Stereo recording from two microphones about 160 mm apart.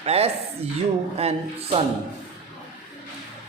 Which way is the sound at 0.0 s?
40° right (ahead or behind).